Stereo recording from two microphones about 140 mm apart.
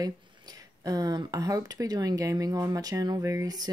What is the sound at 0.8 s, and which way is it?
Speech, 25° right (ahead or behind).